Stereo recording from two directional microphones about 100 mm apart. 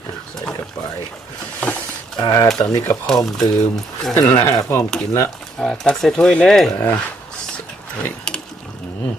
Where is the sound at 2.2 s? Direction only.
40° left (ahead or behind).